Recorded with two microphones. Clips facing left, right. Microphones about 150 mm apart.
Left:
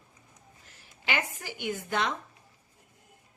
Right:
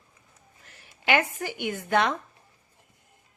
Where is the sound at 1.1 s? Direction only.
60° right (ahead or behind).